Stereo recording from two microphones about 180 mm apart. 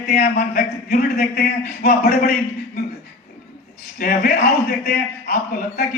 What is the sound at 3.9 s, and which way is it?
A man's voice, 55° left (ahead or behind).